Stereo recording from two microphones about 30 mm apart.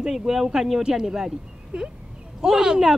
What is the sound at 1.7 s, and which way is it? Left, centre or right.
Speech, right.